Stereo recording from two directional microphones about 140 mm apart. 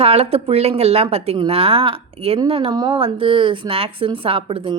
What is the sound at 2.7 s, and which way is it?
Speech, 30° right (ahead or behind).